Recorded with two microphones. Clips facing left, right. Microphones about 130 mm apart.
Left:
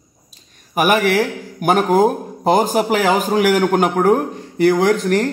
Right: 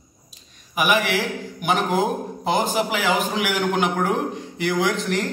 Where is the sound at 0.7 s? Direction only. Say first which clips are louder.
Left 6 dB; 45° left (ahead or behind).